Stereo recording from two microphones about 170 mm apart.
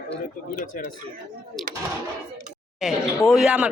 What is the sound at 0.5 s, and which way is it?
Speech, 50° left (ahead or behind).